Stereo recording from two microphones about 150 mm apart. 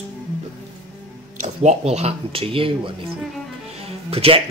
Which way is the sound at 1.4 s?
50° right (ahead or behind).